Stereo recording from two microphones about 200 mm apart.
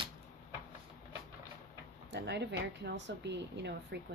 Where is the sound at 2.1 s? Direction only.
60° right (ahead or behind).